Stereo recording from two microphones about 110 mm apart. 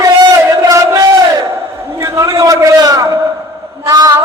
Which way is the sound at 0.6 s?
30° right (ahead or behind).